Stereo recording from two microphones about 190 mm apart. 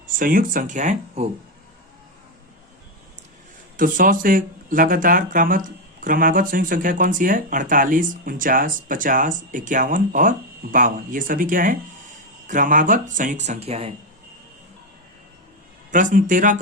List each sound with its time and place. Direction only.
0.1 s speech: 45° right (ahead or behind)
3.8 s speech: 45° right (ahead or behind); by 13.9 s 30° right (ahead or behind)
15.9 s speech: 45° right (ahead or behind)